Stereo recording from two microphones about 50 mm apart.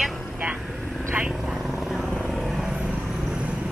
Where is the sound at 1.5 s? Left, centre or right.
Centre.